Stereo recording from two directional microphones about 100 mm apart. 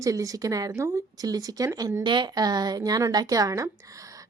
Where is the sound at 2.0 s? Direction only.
50° right (ahead or behind); by 3.7 s 35° right (ahead or behind).